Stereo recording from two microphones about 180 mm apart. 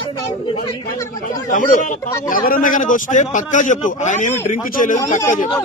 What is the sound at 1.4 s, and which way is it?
A man's voice, 50° left (ahead or behind).